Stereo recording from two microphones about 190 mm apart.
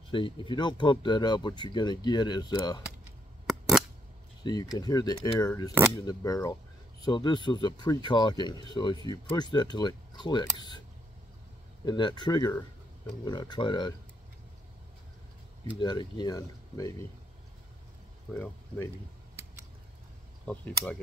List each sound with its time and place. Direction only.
0.1 s speech: 25° left (ahead or behind)
3.4 s scissors: centre (ahead or behind)
4.4 s speech: 20° left (ahead or behind)
11.8 s speech: 25° left (ahead or behind)
15.8 s speech: 25° left (ahead or behind)
18.3 s speech: 10° left (ahead or behind)
20.4 s speech: 5° left (ahead or behind)